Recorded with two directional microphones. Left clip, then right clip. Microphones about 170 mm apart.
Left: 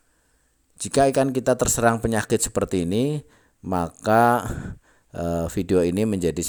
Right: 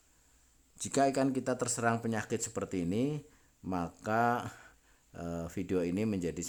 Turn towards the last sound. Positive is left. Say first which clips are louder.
# left 12 dB
turn(degrees=45)  # may be behind; listen again after turning